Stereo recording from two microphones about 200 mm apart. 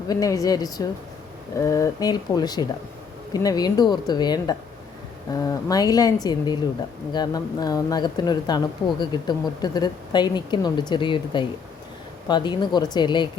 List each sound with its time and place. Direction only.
0.1 s a woman's voice: 15° left (ahead or behind)